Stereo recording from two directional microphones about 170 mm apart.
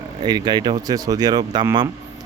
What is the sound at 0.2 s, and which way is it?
A man's voice, 25° right (ahead or behind).